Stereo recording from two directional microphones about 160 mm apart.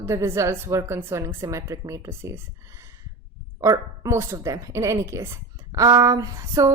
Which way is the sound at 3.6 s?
20° right (ahead or behind).